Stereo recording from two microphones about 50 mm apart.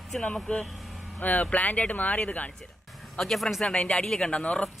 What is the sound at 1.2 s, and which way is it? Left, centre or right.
Speech, left.